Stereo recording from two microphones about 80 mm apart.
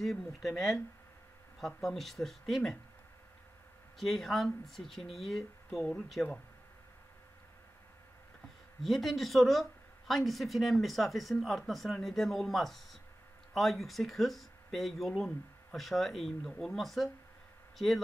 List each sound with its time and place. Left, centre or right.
0.0 s speech: centre
4.0 s speech: centre
8.8 s speech: centre